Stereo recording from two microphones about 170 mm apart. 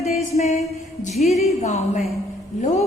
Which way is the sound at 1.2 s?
40° left (ahead or behind).